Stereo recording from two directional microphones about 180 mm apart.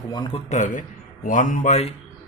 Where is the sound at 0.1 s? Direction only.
25° left (ahead or behind).